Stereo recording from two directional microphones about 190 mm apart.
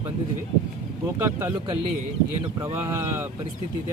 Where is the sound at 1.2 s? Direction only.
15° right (ahead or behind).